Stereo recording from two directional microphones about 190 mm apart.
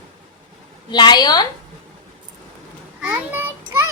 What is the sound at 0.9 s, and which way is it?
Speech, 25° left (ahead or behind).